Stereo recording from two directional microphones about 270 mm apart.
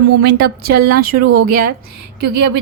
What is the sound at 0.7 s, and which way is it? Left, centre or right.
Speech, right.